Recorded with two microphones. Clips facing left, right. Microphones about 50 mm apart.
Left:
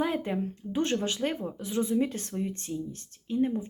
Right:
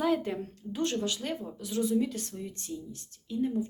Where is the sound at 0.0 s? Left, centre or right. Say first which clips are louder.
Even; left.